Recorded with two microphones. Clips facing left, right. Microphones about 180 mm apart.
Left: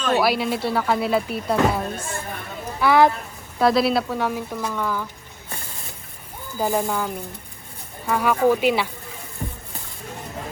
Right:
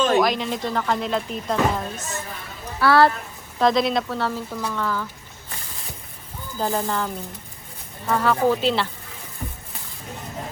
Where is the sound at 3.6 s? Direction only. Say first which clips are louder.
Left 1 dB; 5° left (ahead or behind).